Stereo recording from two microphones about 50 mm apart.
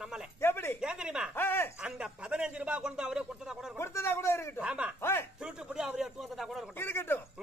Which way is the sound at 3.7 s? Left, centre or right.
Left.